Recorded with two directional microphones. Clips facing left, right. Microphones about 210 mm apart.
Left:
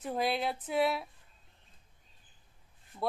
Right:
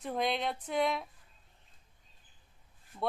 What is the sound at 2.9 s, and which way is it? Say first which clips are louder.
Speech: even; 5° left (ahead or behind).